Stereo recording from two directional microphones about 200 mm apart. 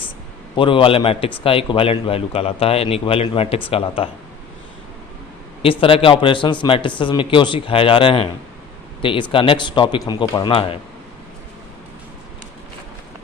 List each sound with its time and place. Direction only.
0.6 s a man's voice: 25° left (ahead or behind)
5.6 s a man's voice: 25° left (ahead or behind)